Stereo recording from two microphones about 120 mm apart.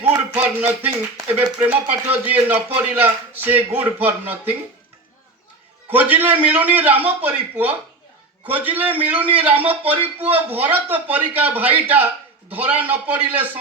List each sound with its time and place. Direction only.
0.0 s music: 15° right (ahead or behind)
1.5 s speech: 15° right (ahead or behind)
5.9 s speech: 15° right (ahead or behind)